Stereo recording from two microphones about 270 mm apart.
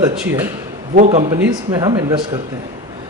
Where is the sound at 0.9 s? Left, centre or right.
Right.